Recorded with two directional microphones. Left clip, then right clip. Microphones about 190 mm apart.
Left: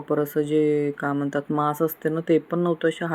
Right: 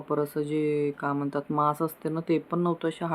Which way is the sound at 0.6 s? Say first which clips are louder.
Left 5 dB; 75° left (ahead or behind).